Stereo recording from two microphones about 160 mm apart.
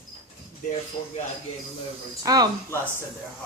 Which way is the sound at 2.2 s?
25° right (ahead or behind).